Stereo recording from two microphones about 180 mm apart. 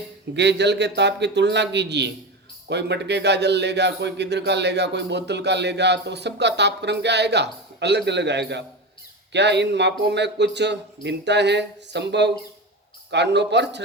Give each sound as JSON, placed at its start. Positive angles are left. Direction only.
{"t": 0.3, "sound": "a man's voice", "side_deg": -70}